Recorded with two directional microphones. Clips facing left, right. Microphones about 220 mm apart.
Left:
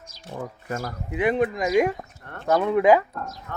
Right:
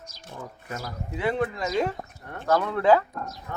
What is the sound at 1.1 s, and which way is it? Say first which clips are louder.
Speech: left 4 dB; 15° left (ahead or behind).